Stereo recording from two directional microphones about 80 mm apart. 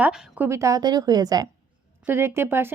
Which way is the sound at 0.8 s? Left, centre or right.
Right.